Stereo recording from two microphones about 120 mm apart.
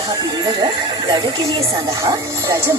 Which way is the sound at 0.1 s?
35° right (ahead or behind).